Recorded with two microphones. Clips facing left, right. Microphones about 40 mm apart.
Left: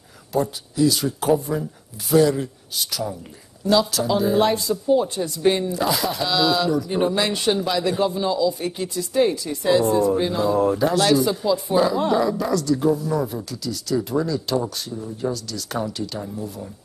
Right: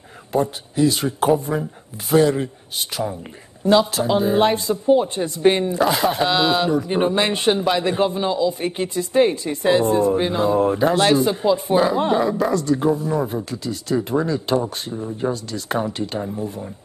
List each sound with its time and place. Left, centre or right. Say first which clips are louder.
0.3 s speech: right 2 dB; right